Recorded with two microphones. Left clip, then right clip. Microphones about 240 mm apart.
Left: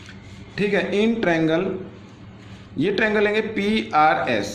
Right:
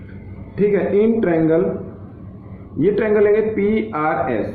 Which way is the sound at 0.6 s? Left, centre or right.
Left.